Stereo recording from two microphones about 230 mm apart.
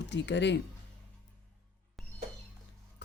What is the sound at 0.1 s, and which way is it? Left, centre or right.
Speech, left.